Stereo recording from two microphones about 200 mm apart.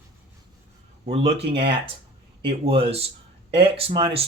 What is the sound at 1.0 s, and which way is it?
Speech, 30° right (ahead or behind).